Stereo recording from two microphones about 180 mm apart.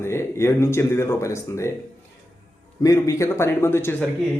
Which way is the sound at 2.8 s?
15° left (ahead or behind).